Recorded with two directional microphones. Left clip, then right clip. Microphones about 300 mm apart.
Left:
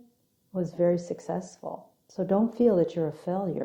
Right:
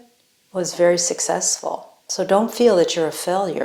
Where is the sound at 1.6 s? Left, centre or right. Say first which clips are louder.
Right 11 dB; right.